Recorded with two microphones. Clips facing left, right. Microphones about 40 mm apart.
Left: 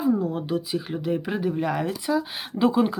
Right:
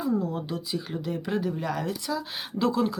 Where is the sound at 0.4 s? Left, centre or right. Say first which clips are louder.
Left 5 dB; left.